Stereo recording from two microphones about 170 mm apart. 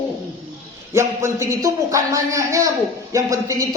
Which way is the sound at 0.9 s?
15° right (ahead or behind).